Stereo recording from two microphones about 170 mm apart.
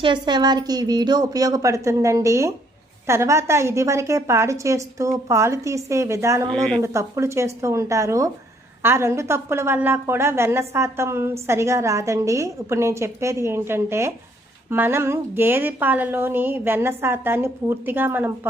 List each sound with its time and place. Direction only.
0.0 s a woman's voice: 25° right (ahead or behind)
6.5 s speech: 5° left (ahead or behind)
6.8 s a woman's voice: 15° right (ahead or behind)